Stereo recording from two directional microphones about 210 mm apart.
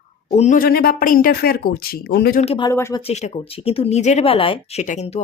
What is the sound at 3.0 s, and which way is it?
Speech, 30° left (ahead or behind).